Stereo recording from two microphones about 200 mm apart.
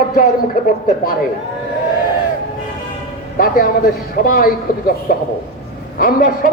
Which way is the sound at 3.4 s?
45° left (ahead or behind).